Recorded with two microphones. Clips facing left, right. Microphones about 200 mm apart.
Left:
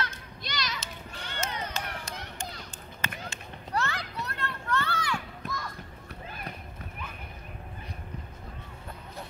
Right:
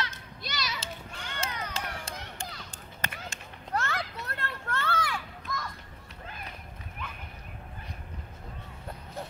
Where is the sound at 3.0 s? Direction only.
45° right (ahead or behind).